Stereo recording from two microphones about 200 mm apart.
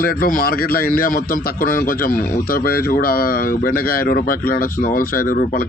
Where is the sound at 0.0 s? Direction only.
45° left (ahead or behind).